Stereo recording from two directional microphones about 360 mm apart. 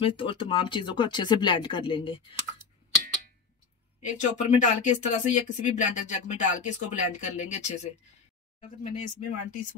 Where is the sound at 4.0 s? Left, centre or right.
Centre.